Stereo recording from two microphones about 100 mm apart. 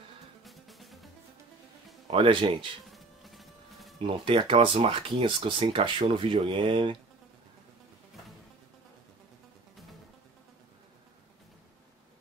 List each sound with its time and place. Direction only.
0.4 s music: centre (ahead or behind)
2.0 s speech: 60° right (ahead or behind)
2.9 s music: centre (ahead or behind)
4.0 s speech: 60° right (ahead or behind)